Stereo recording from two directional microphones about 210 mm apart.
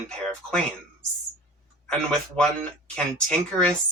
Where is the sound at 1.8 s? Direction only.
5° left (ahead or behind).